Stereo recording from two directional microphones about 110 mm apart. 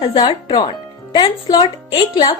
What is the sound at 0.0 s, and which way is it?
Speech, 45° left (ahead or behind).